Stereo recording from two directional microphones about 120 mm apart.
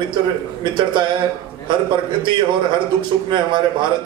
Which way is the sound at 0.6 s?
40° right (ahead or behind).